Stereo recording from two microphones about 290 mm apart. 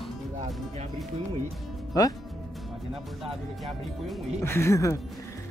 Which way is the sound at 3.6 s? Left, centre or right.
Centre.